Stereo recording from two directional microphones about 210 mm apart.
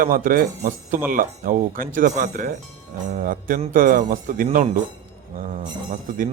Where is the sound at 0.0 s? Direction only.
40° right (ahead or behind).